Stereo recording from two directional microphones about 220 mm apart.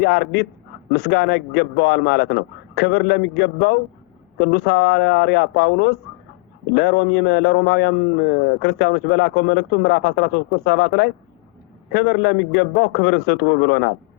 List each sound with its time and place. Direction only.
0.0 s a man's voice: 50° left (ahead or behind)